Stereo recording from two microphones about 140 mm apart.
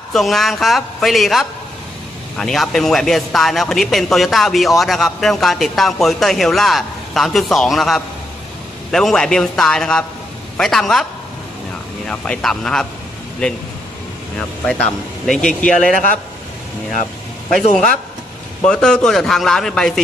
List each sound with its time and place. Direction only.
0.1 s a man's voice: centre (ahead or behind)
12.1 s a man's voice: 5° left (ahead or behind)
15.2 s a man's voice: 5° left (ahead or behind)
17.6 s a man's voice: 55° left (ahead or behind)
18.6 s a man's voice: 5° left (ahead or behind)